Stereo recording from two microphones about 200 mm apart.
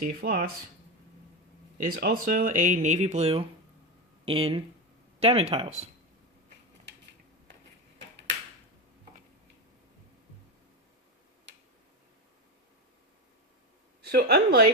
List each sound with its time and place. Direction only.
0.2 s speech: 45° right (ahead or behind)
1.8 s speech: 45° right (ahead or behind); by 5.9 s 30° right (ahead or behind)
14.0 s speech: 50° right (ahead or behind)